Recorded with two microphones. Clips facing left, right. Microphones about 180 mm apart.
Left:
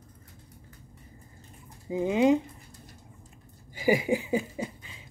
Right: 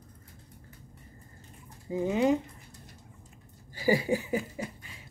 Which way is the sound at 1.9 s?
15° left (ahead or behind).